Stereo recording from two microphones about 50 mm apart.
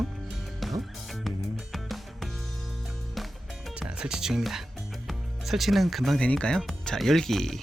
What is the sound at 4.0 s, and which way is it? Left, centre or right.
Speech, centre.